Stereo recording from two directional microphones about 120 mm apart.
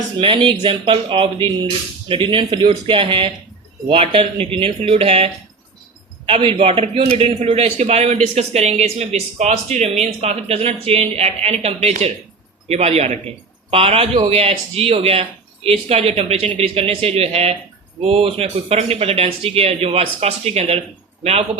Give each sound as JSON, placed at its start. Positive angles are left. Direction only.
{"t": 0.2, "sound": "a man's voice", "side_deg": -45}